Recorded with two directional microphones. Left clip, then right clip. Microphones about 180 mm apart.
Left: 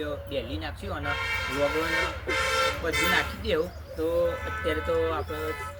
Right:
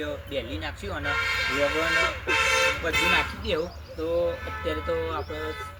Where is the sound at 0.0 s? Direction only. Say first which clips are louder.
Right 1 dB; centre (ahead or behind).